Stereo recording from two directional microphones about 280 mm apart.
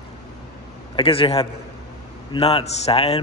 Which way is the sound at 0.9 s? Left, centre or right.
Centre.